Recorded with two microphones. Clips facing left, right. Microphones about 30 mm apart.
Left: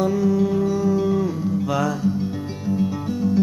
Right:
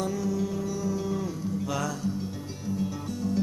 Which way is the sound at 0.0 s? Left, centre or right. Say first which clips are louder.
Left 10 dB; left.